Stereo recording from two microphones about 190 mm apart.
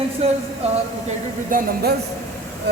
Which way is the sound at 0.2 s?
30° right (ahead or behind).